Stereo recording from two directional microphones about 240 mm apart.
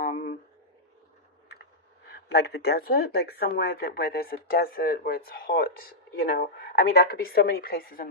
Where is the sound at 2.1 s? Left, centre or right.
Left.